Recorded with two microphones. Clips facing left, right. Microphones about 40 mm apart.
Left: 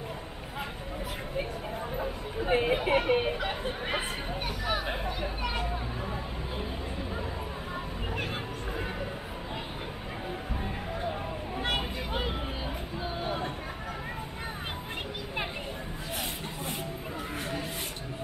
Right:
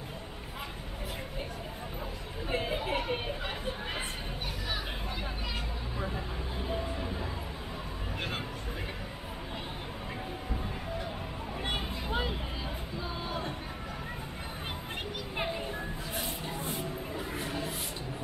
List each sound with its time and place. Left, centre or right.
2.4 s speech: left
2.7 s speech: left
13.0 s a sound: left